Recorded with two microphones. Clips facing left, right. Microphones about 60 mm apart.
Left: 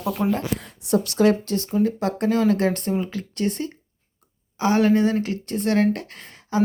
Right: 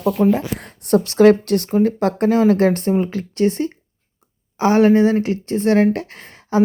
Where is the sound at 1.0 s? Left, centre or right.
Right.